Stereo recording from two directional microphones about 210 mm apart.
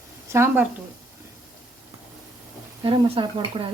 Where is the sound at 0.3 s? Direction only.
10° right (ahead or behind).